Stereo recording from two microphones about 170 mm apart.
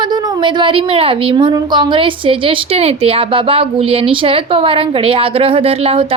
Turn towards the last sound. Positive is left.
turn(degrees=-35)  # may be behind; listen again after turning